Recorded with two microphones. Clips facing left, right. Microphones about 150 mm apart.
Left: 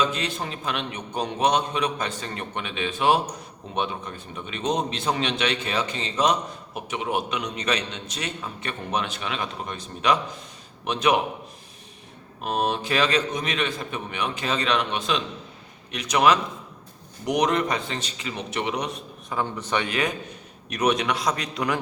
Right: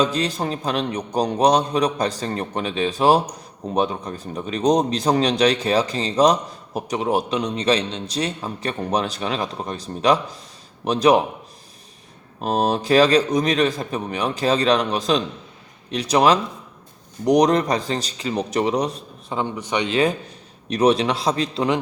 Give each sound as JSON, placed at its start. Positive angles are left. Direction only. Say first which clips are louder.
{"t": 0.0, "sound": "a man's voice", "louder": "right 5 dB", "side_deg": -35}
{"t": 12.4, "sound": "a man's voice", "louder": "right 5 dB", "side_deg": -35}
{"t": 19.4, "sound": "a man's voice", "louder": "right 3 dB", "side_deg": -15}
{"t": 20.7, "sound": "a man's voice", "louder": "right 6 dB", "side_deg": -30}